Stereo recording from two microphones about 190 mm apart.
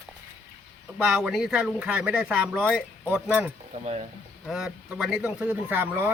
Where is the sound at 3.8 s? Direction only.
35° right (ahead or behind).